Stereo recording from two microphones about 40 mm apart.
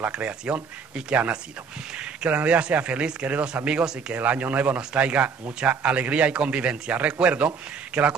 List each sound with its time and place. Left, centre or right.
0.1 s speech: right
2.2 s a man's voice: right
4.1 s a man's voice: right